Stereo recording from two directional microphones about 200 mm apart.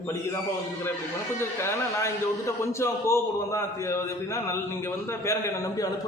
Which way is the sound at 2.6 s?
15° left (ahead or behind).